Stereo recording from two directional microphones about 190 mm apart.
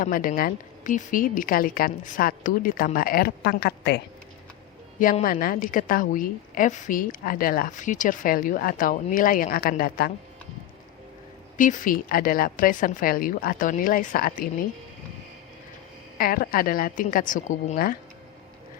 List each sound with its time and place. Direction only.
0.0 s a woman's voice: 45° left (ahead or behind)
4.9 s a woman's voice: 45° left (ahead or behind)
11.5 s a woman's voice: 45° left (ahead or behind)
16.1 s a woman's voice: 50° left (ahead or behind)